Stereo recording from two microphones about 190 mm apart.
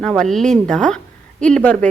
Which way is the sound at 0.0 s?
5° left (ahead or behind).